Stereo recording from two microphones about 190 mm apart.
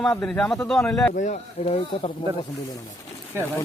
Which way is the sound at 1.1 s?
40° left (ahead or behind).